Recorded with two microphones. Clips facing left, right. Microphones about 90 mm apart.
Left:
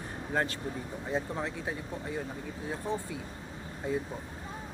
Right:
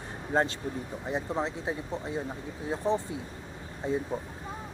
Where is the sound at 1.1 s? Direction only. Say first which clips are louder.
Right 2 dB; 20° right (ahead or behind).